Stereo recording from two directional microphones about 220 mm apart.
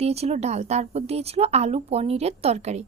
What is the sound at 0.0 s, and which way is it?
Speech, 30° right (ahead or behind).